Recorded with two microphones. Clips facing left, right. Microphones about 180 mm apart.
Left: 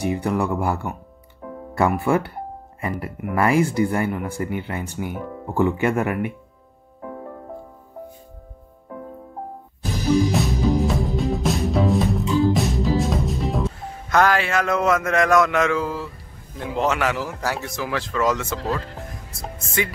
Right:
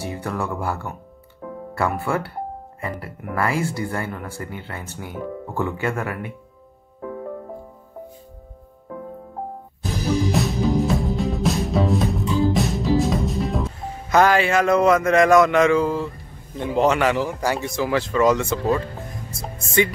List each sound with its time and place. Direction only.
0.0 s speech: 15° left (ahead or behind)
9.9 s music: centre (ahead or behind)
16.5 s speech: centre (ahead or behind)